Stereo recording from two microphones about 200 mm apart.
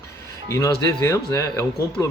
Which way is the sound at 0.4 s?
15° left (ahead or behind).